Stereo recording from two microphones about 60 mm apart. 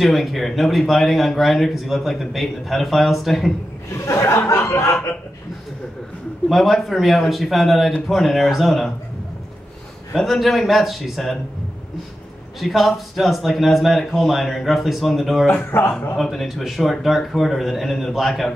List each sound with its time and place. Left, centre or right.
0.0 s a man's voice: centre
3.9 s speech: left
6.5 s a man's voice: centre
10.1 s a man's voice: centre
12.5 s a man's voice: centre
15.5 s speech: left
16.2 s a man's voice: centre